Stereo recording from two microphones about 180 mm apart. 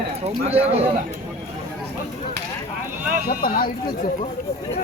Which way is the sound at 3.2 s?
50° left (ahead or behind).